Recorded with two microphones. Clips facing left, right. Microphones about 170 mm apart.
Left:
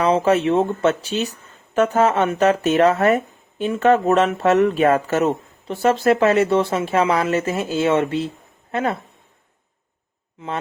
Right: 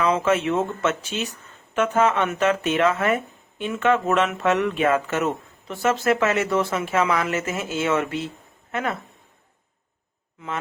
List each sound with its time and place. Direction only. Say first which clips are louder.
0.0 s speech: left 4 dB; 35° left (ahead or behind)